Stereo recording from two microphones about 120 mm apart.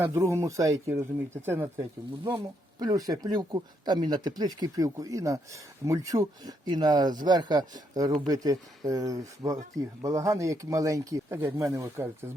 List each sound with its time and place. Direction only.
0.0 s speech: 20° right (ahead or behind)
2.4 s speech: 35° right (ahead or behind)